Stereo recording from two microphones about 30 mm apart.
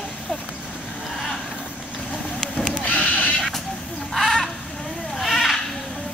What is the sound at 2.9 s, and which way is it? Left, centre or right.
Horse, left.